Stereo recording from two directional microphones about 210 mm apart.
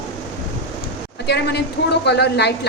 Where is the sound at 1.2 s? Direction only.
50° left (ahead or behind).